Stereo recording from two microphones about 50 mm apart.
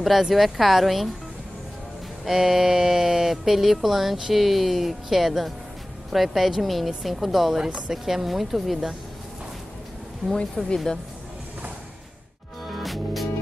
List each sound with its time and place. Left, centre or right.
0.0 s speech: centre
2.2 s speech: centre
10.3 s speech: centre
12.6 s music: centre